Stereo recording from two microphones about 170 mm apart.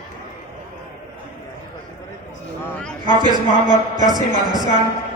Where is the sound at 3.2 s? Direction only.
25° right (ahead or behind).